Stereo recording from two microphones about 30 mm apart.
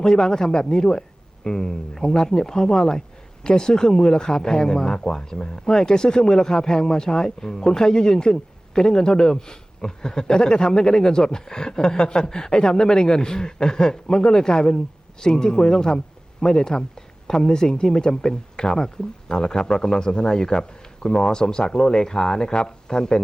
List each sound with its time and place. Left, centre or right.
0.0 s speech: left